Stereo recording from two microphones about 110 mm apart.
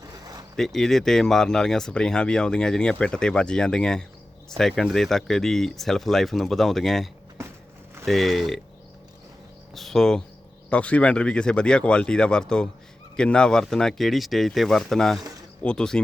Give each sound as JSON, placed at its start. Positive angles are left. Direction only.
{"t": 0.5, "sound": "speech", "side_deg": 5}
{"t": 7.4, "sound": "a sound", "side_deg": -25}
{"t": 8.0, "sound": "speech", "side_deg": 0}
{"t": 9.7, "sound": "speech", "side_deg": 0}